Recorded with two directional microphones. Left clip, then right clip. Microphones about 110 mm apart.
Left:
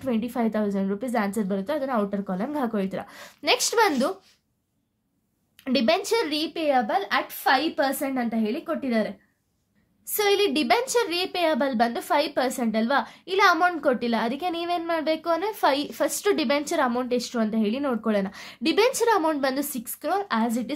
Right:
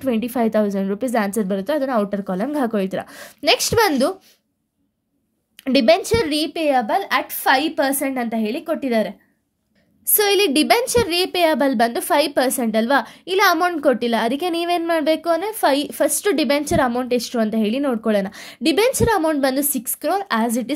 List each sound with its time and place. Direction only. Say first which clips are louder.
0.0 s a woman's voice: right 6 dB; 55° right (ahead or behind)
5.6 s a woman's voice: right 8 dB; 55° right (ahead or behind); by 9.1 s 75° right (ahead or behind)
10.1 s a woman's voice: right 5 dB; 50° right (ahead or behind)
15.3 s a woman's voice: right 5 dB; 35° right (ahead or behind); by 20.7 s 60° right (ahead or behind)